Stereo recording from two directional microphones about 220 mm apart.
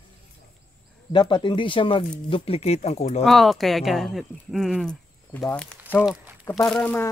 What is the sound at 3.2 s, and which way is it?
Speech, centre (ahead or behind).